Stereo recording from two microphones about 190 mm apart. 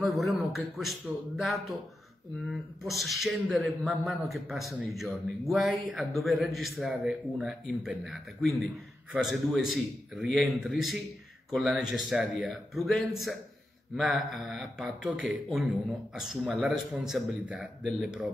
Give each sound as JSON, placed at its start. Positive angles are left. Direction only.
{"t": 0.0, "sound": "a man's voice", "side_deg": 0}